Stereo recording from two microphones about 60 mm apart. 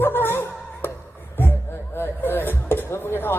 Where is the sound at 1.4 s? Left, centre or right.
Left.